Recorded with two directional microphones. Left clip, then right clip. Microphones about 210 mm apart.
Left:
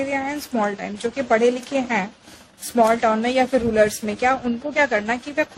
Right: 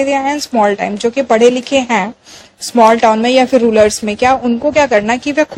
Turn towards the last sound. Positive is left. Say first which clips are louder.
# right 10 dB
turn(degrees=-35)  # may be behind; listen again after turning